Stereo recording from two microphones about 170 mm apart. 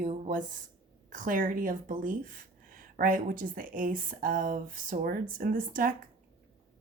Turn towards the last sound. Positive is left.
turn(degrees=-55)  # may be behind; listen again after turning